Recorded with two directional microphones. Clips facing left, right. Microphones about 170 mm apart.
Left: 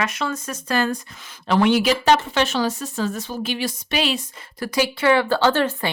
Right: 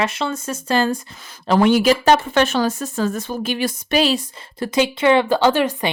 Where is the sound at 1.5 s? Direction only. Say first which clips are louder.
Right 3 dB; 45° right (ahead or behind).